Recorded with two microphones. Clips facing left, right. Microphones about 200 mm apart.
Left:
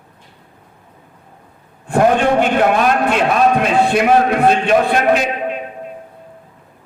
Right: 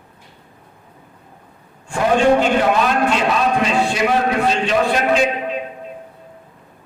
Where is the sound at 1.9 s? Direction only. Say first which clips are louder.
Left 1 dB; 55° left (ahead or behind).